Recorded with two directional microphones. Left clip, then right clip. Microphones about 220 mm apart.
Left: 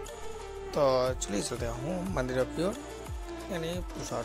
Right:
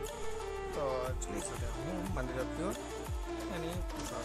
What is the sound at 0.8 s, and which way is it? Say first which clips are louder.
Speech: left 11 dB; 25° left (ahead or behind).